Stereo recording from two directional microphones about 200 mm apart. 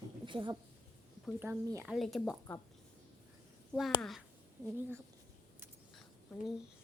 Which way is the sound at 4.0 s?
Centre (ahead or behind).